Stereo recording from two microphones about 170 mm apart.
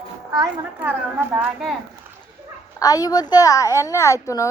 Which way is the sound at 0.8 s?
10° right (ahead or behind).